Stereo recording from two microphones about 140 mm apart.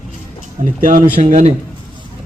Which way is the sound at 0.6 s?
75° right (ahead or behind).